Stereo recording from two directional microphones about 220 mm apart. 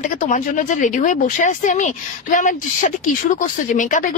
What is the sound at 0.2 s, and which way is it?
Speech, 35° left (ahead or behind).